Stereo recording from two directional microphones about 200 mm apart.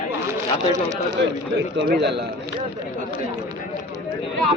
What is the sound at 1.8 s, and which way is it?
Speech, 55° right (ahead or behind).